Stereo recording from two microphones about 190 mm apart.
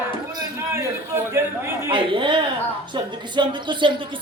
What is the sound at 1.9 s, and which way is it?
Speech, 25° right (ahead or behind).